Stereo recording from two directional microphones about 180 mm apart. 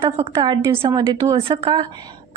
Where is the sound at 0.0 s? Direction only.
25° right (ahead or behind).